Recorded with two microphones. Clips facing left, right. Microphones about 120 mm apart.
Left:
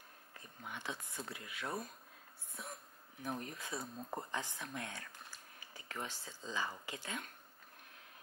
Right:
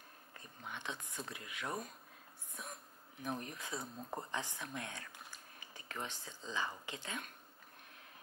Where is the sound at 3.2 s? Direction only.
20° right (ahead or behind).